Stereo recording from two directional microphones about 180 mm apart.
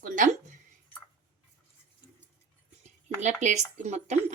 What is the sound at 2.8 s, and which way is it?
Speech, 40° right (ahead or behind).